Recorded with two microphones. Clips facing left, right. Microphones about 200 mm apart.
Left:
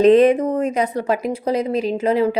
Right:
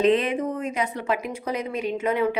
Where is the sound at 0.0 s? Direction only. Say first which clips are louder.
Left 9 dB; 40° left (ahead or behind).